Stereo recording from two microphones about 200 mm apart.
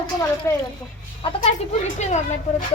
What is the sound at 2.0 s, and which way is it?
Speech, 35° left (ahead or behind).